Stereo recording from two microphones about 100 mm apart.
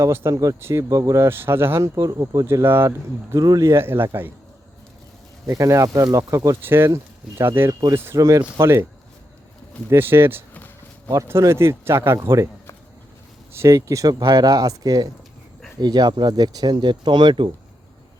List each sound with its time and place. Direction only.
0.0 s speech: 30° right (ahead or behind)
3.3 s speech: 35° right (ahead or behind)
5.5 s speech: 30° right (ahead or behind)
9.9 s speech: 25° right (ahead or behind)
10.5 s a sound: 20° left (ahead or behind)
11.1 s speech: 30° right (ahead or behind)
13.5 s speech: 30° right (ahead or behind); by 17.5 s 55° right (ahead or behind)